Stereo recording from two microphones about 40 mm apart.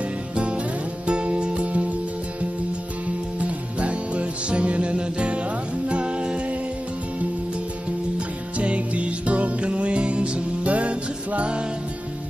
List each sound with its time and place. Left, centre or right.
1.0 s music: right
3.3 s music: right
8.5 s music: right